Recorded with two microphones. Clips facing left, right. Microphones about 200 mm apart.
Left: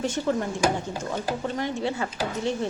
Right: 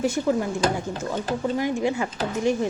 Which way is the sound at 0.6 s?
10° left (ahead or behind).